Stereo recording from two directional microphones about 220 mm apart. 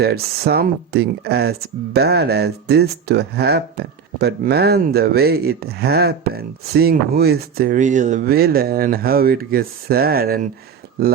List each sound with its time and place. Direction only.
0.0 s speech: 45° right (ahead or behind)